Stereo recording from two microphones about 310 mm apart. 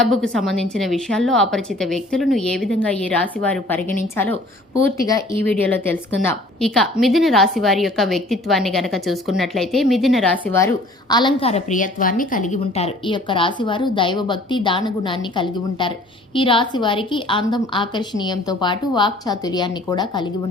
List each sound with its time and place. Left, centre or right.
0.0 s a woman's voice: centre